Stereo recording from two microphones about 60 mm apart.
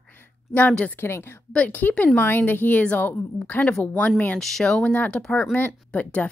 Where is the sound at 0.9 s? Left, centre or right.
Left.